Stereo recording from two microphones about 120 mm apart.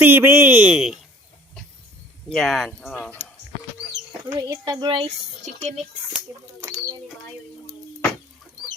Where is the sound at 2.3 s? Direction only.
5° left (ahead or behind).